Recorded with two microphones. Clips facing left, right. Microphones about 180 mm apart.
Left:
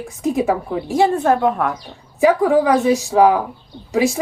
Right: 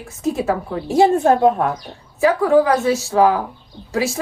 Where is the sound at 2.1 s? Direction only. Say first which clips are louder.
Even; 15° left (ahead or behind).